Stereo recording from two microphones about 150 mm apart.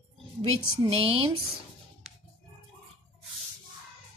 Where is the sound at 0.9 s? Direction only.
40° right (ahead or behind).